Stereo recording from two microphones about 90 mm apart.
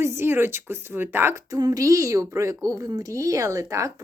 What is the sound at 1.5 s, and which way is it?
A child's voice, 45° right (ahead or behind).